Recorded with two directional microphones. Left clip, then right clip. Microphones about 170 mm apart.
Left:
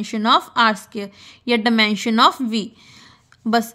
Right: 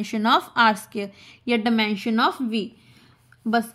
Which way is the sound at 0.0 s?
20° left (ahead or behind).